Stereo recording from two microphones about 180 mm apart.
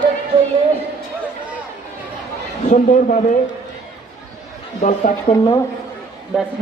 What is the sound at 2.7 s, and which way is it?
Speech, 45° left (ahead or behind).